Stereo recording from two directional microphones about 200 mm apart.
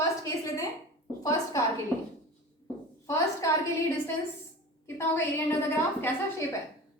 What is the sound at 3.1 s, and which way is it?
Speech, 15° left (ahead or behind).